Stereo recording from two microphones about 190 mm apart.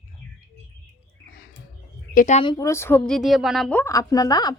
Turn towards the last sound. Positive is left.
turn(degrees=20)  # may be behind; listen again after turning